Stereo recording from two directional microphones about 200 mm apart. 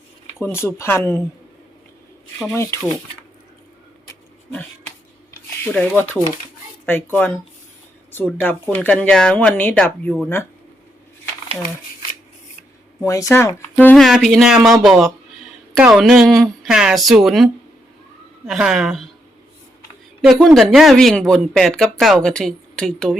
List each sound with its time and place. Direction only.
0.3 s speech: 10° left (ahead or behind)
2.5 s speech: 15° left (ahead or behind)
5.6 s speech: 10° left (ahead or behind)
13.0 s speech: 15° left (ahead or behind)
13.7 s speech: 5° left (ahead or behind)
20.2 s speech: centre (ahead or behind)